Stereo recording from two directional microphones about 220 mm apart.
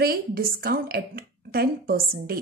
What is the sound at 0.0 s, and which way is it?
A woman's voice, 45° right (ahead or behind).